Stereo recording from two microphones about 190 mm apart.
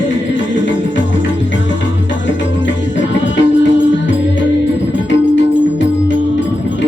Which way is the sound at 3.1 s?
75° left (ahead or behind).